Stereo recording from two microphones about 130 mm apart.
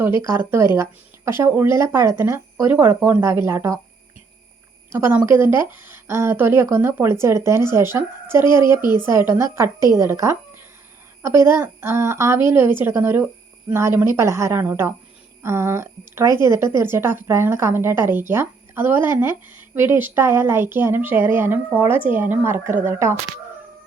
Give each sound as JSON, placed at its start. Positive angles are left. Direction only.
{"t": 0.2, "sound": "speech", "side_deg": -20}
{"t": 4.9, "sound": "a woman's voice", "side_deg": -20}